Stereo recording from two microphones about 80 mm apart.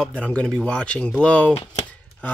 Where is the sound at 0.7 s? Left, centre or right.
Centre.